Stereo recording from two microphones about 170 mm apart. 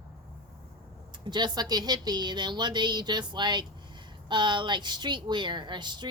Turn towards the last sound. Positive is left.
turn(degrees=-25)  # may be behind; listen again after turning